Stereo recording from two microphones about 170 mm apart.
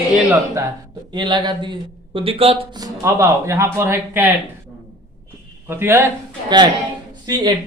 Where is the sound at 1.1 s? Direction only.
25° right (ahead or behind).